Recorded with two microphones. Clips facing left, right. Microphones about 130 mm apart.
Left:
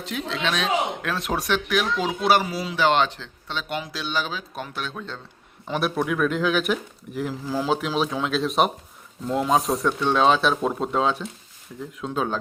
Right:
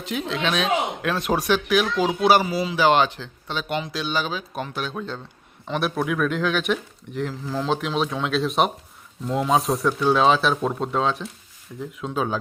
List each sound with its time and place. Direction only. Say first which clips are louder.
0.0 s speech: right 2 dB; centre (ahead or behind)